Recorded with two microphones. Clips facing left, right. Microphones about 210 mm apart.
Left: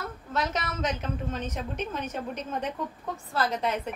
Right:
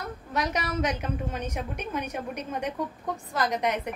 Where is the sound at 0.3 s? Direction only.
15° right (ahead or behind).